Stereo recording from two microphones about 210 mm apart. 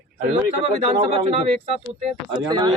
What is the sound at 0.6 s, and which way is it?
Speech, 25° right (ahead or behind).